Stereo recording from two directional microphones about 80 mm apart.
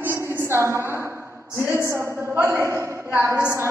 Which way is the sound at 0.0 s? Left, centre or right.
Right.